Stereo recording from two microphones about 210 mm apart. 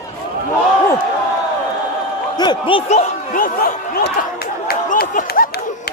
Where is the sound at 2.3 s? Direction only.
20° left (ahead or behind).